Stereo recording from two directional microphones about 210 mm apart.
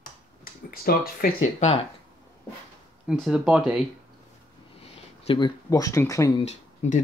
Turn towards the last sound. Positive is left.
turn(degrees=35)  # may be behind; listen again after turning